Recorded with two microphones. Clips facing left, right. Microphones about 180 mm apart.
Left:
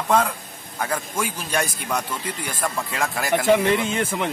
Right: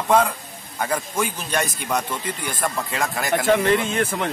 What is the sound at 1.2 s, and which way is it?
Speech, 10° left (ahead or behind).